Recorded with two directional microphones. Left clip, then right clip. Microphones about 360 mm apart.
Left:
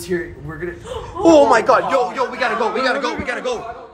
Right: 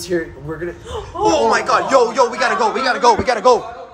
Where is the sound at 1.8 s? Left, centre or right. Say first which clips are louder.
Right 4 dB; centre.